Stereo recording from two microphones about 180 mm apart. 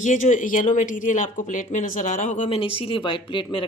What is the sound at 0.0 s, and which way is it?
Speech, 45° left (ahead or behind).